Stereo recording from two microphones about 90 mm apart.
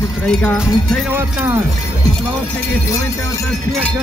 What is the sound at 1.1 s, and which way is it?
Speech, 25° right (ahead or behind).